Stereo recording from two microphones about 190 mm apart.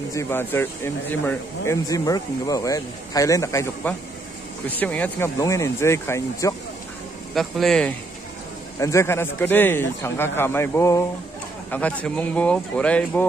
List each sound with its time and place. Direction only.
0.1 s a man's voice: 15° left (ahead or behind)
7.3 s speech: centre (ahead or behind)
8.7 s a man's voice: 15° left (ahead or behind)